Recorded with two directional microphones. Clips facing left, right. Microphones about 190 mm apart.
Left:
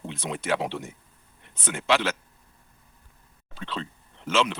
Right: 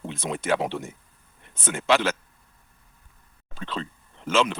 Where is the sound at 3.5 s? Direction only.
45° right (ahead or behind).